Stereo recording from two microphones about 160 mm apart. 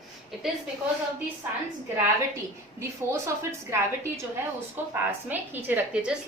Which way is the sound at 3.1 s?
15° right (ahead or behind).